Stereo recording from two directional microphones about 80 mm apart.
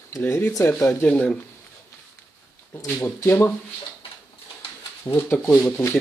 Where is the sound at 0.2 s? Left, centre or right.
Left.